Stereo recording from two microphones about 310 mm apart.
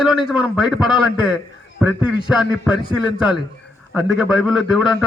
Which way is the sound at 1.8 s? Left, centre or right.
Centre.